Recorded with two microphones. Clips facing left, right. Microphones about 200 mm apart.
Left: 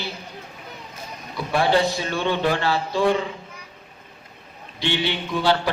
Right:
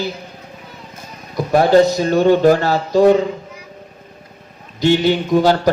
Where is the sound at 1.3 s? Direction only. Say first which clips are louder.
Right 9 dB; 45° right (ahead or behind).